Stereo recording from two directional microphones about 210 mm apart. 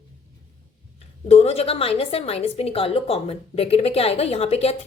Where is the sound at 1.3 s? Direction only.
30° left (ahead or behind).